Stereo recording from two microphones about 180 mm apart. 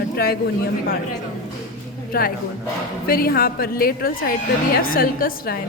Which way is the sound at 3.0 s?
55° left (ahead or behind).